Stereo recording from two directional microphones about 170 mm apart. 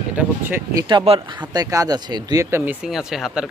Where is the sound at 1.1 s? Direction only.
40° right (ahead or behind).